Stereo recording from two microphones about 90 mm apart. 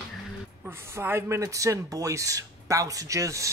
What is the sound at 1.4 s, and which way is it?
Speech, 35° right (ahead or behind).